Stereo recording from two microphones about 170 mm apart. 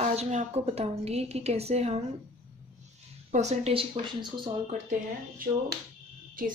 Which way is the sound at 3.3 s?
40° right (ahead or behind).